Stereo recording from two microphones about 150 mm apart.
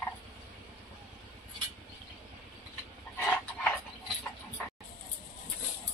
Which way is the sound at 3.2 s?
10° left (ahead or behind).